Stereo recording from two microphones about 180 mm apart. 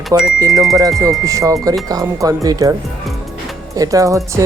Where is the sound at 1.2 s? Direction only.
20° right (ahead or behind).